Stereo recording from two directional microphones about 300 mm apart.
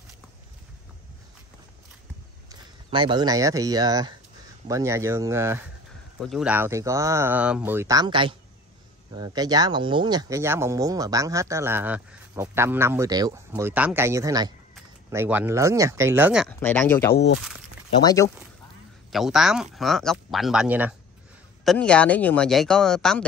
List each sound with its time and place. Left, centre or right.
2.5 s speech: centre
17.1 s speech: left
18.0 s speech: centre
19.1 s speech: centre